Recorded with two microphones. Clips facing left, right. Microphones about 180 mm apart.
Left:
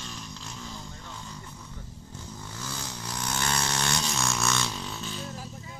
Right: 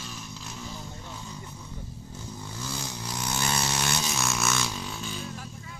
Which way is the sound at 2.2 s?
10° right (ahead or behind).